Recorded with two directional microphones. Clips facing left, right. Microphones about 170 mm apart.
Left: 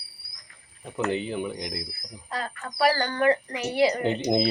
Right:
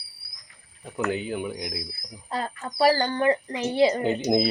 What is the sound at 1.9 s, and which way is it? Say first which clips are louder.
Speech: right 2 dB; 25° right (ahead or behind).